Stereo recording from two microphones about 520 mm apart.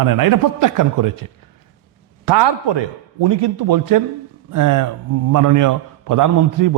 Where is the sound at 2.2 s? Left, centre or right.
Right.